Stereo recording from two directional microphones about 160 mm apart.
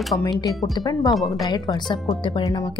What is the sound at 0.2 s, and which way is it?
Speech, 20° left (ahead or behind).